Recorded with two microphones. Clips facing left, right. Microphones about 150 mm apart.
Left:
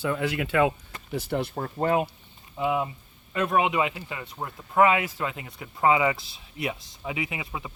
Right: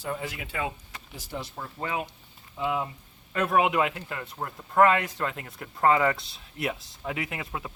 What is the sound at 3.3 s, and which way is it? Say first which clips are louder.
Speech: even; centre (ahead or behind).